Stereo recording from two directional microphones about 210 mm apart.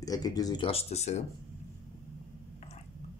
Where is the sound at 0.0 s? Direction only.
15° left (ahead or behind).